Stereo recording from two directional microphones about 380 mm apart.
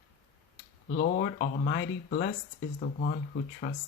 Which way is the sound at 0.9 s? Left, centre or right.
Left.